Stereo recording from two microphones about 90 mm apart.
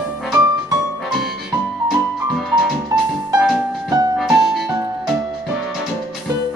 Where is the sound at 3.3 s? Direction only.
5° right (ahead or behind).